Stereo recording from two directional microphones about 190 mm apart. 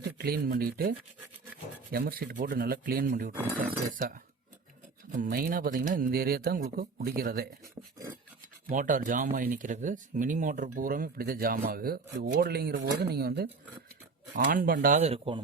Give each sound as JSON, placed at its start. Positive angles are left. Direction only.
{"t": 0.2, "sound": "speech", "side_deg": -50}